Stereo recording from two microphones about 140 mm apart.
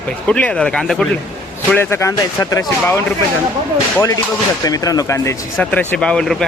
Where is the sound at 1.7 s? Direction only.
15° left (ahead or behind).